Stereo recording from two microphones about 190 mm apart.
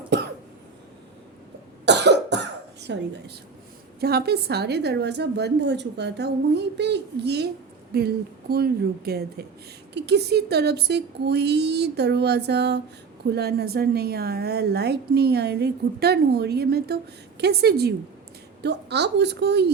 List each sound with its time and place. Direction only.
0.1 s cough: 65° right (ahead or behind)
1.8 s cough: 65° right (ahead or behind)
2.8 s a woman's voice: 60° right (ahead or behind)